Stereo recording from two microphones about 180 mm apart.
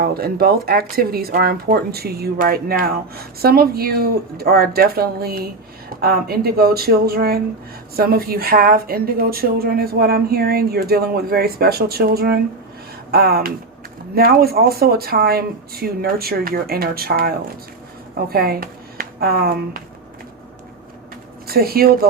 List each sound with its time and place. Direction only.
0.0 s a woman's voice: 60° right (ahead or behind)
21.4 s speech: 55° right (ahead or behind)